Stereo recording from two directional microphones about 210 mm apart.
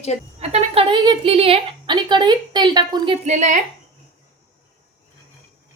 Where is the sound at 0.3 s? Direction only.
30° right (ahead or behind).